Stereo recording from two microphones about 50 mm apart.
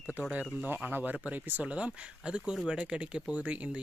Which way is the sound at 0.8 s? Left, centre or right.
Right.